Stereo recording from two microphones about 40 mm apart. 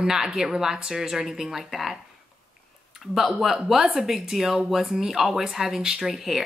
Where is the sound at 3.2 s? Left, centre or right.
Centre.